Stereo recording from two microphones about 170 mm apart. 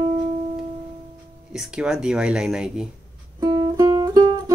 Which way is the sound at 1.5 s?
5° right (ahead or behind).